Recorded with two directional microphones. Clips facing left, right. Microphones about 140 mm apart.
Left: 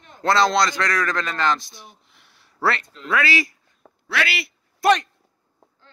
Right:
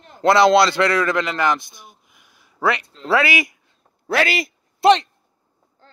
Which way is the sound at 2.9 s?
30° right (ahead or behind).